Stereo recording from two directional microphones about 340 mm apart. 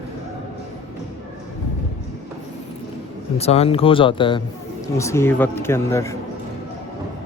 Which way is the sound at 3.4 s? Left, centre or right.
Centre.